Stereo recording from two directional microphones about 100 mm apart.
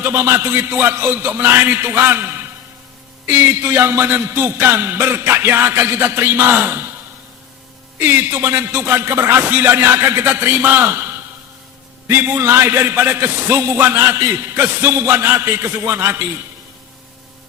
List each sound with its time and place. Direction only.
0.0 s a man's voice: 25° right (ahead or behind)
7.9 s a man's voice: 20° right (ahead or behind)
12.0 s a man's voice: 25° right (ahead or behind)